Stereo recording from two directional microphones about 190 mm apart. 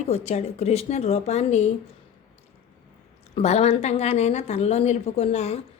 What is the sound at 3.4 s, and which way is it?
Speech, 35° left (ahead or behind).